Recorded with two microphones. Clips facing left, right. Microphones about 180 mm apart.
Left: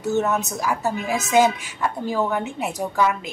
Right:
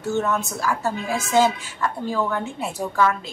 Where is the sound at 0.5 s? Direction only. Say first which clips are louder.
Left 1 dB; 20° left (ahead or behind).